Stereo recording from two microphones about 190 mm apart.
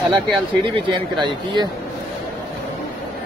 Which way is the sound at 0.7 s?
25° right (ahead or behind).